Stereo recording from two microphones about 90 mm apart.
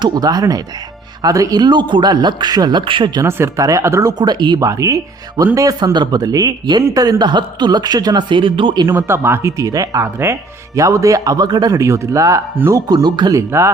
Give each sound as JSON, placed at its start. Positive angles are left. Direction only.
{"t": 0.0, "sound": "speech", "side_deg": -45}
{"t": 3.2, "sound": "speech", "side_deg": -30}
{"t": 4.2, "sound": "speech", "side_deg": -55}
{"t": 8.9, "sound": "speech", "side_deg": -30}
{"t": 12.7, "sound": "speech", "side_deg": -45}
{"t": 13.3, "sound": "speech", "side_deg": -35}